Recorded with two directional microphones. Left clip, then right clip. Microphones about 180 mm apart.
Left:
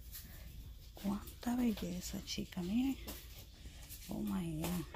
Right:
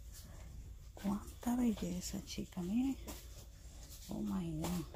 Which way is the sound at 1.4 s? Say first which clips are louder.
Even; 15° right (ahead or behind).